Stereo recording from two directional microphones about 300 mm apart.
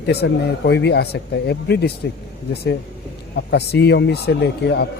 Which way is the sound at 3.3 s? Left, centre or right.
Left.